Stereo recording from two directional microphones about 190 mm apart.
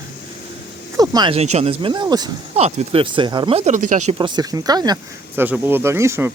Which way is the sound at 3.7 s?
40° right (ahead or behind).